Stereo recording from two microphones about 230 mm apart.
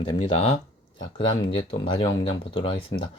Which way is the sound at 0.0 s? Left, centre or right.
Left.